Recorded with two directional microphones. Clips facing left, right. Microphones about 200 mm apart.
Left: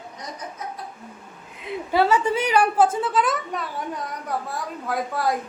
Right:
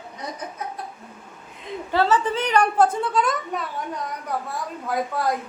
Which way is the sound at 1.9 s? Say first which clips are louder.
Left 1 dB; 10° left (ahead or behind).